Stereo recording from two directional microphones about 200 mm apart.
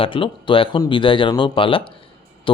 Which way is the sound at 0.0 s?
25° left (ahead or behind).